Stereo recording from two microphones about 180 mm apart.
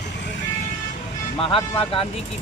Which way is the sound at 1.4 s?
30° left (ahead or behind).